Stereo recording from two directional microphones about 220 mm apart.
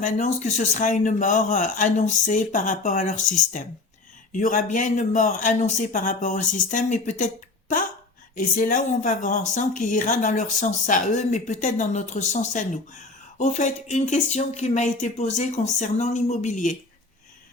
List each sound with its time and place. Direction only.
0.0 s speech: 30° left (ahead or behind)
8.4 s speech: 35° left (ahead or behind)